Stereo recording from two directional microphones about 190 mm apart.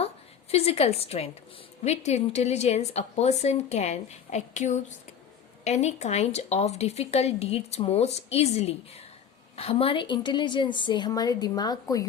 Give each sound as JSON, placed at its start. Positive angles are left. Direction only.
{"t": 0.5, "sound": "a woman's voice", "side_deg": 30}